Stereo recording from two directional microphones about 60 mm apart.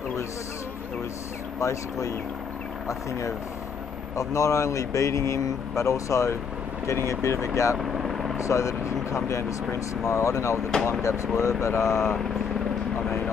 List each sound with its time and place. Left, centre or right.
1.6 s speech: left
7.8 s vehicle: centre
8.4 s speech: left